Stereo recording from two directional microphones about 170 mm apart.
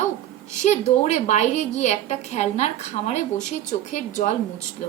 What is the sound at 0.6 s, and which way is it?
A woman's voice, 40° left (ahead or behind).